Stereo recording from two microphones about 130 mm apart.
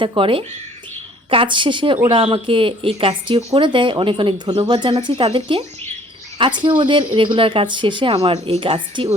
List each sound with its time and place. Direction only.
0.0 s speech: 40° right (ahead or behind)
8.1 s speech: 50° right (ahead or behind)